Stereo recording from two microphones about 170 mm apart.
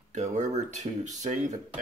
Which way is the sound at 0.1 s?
45° right (ahead or behind).